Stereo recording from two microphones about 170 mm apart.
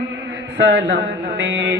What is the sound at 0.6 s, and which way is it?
Speech, 85° right.